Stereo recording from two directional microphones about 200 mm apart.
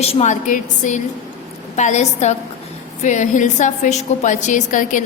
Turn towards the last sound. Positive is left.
turn(degrees=40)  # may be behind; listen again after turning